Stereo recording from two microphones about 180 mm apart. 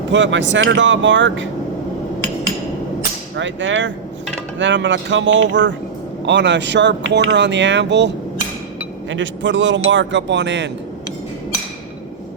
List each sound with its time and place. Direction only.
0.1 s a man's voice: 90° right
3.3 s a man's voice: 90° right
6.2 s speech: 80° right
9.0 s a man's voice: 90° right